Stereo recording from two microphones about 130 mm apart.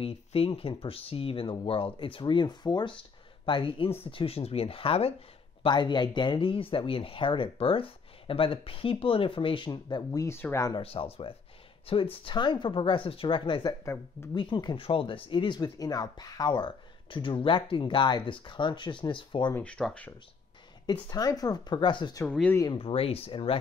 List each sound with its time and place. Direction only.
0.0 s speech: 45° left (ahead or behind)
5.6 s speech: 35° left (ahead or behind); by 10.7 s 20° left (ahead or behind)
10.8 s speech: 50° left (ahead or behind)
19.5 s speech: 10° left (ahead or behind)
20.8 s speech: 30° left (ahead or behind)
22.3 s speech: 10° left (ahead or behind)
22.8 s speech: 45° left (ahead or behind)